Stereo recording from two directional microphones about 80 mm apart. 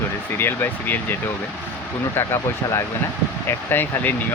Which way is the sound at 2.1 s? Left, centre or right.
Left.